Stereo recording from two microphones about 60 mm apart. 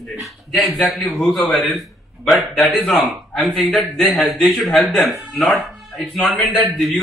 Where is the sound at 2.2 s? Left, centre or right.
Centre.